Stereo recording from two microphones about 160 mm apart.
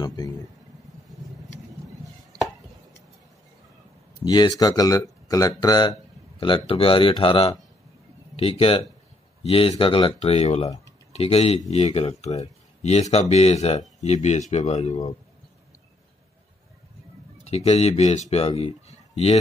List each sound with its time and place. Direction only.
0.0 s speech: 25° left (ahead or behind)
4.2 s a man's voice: 25° left (ahead or behind); by 15.1 s 40° left (ahead or behind)
17.5 s speech: 40° left (ahead or behind)
18.6 s a sound: 40° left (ahead or behind)